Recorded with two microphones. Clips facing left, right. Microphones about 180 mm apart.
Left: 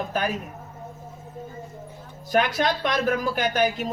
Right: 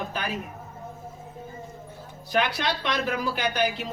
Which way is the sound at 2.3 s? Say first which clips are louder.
Left 4 dB; 45° left (ahead or behind).